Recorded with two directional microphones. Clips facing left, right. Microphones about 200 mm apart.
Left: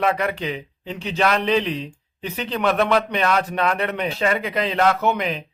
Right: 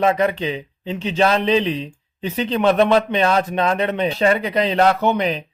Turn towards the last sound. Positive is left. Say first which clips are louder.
# right 3 dB
turn(degrees=-30)  # may be behind; listen again after turning